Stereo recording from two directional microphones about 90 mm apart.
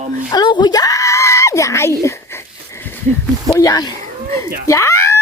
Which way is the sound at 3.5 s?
40° left (ahead or behind).